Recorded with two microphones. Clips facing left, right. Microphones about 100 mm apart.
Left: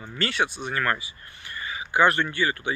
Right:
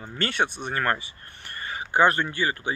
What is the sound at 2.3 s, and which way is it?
Speech, 35° right (ahead or behind).